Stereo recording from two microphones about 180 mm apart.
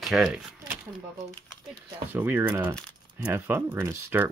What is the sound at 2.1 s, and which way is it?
Speech, 10° right (ahead or behind).